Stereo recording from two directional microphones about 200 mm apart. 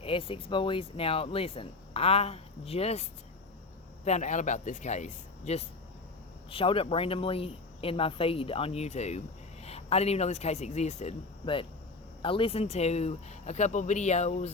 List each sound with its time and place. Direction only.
0.0 s speech: 25° left (ahead or behind)